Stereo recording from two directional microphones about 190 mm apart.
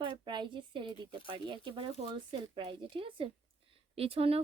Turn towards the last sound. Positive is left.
turn(degrees=-30)  # may be behind; listen again after turning